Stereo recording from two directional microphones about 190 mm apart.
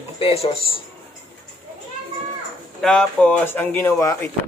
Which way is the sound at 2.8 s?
5° left (ahead or behind).